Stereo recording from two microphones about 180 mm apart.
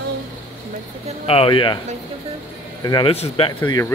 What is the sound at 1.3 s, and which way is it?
Speech, 30° left (ahead or behind).